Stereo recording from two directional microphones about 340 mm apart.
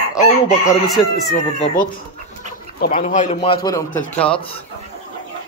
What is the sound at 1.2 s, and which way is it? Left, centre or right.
Speech, left.